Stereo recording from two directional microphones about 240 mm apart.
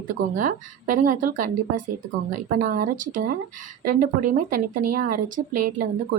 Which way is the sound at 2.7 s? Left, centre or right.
Right.